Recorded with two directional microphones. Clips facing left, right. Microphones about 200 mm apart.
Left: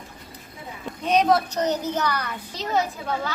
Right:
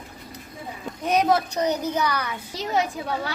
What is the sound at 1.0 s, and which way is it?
A woman's voice, 10° right (ahead or behind).